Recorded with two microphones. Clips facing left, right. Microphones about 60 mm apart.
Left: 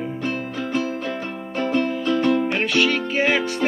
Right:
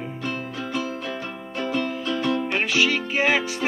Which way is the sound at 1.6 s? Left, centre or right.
Left.